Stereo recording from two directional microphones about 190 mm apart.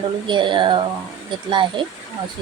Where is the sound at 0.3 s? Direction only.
25° right (ahead or behind).